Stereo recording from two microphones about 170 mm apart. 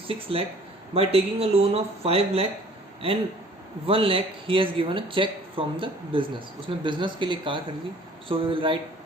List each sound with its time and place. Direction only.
0.1 s speech: 35° right (ahead or behind)
3.8 s speech: 35° right (ahead or behind)